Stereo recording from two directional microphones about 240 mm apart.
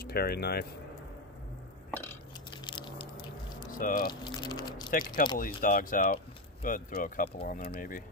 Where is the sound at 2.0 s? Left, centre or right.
Centre.